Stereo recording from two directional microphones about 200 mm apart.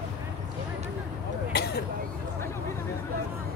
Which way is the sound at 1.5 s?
55° left (ahead or behind).